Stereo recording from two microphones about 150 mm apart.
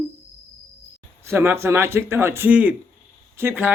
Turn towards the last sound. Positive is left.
turn(degrees=-15)  # may be behind; listen again after turning